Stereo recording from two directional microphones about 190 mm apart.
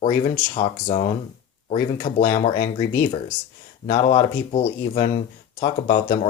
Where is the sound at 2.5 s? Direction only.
15° left (ahead or behind).